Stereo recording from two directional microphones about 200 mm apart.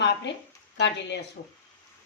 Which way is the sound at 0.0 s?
60° left (ahead or behind).